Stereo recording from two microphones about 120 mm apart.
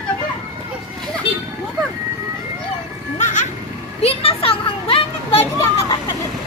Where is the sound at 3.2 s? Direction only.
90° left.